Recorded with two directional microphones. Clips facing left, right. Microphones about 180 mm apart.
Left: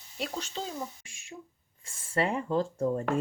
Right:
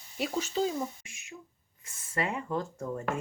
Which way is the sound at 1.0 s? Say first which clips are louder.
Left 1 dB; 30° left (ahead or behind).